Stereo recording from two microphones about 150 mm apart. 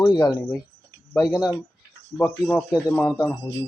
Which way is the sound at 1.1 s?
5° left (ahead or behind).